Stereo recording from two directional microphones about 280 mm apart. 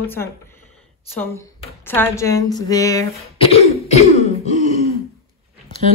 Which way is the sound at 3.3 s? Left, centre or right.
Left.